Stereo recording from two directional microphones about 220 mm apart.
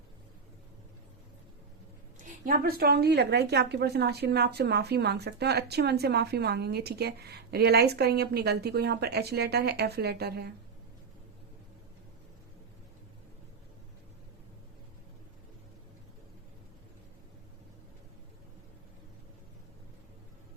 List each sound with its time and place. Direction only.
2.1 s speech: 40° right (ahead or behind)